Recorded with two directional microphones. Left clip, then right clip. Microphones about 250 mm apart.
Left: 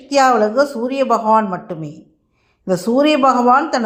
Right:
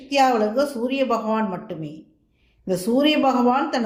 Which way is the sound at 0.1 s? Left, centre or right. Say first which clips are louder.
Left 6 dB; left.